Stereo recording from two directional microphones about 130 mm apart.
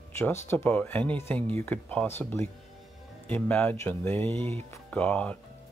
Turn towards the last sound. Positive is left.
turn(degrees=10)  # may be behind; listen again after turning